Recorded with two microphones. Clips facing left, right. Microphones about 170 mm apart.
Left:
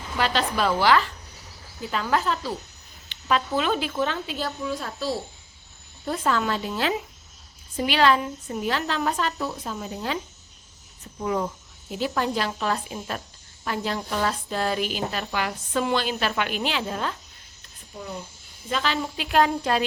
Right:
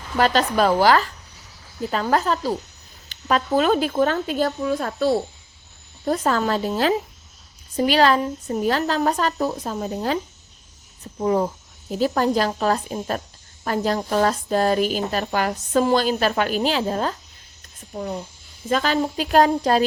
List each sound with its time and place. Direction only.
0.2 s a woman's voice: 45° right (ahead or behind)
6.1 s a woman's voice: 40° right (ahead or behind)
17.9 s a woman's voice: 50° right (ahead or behind)